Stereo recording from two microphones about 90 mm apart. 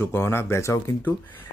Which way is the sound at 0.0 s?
25° left (ahead or behind).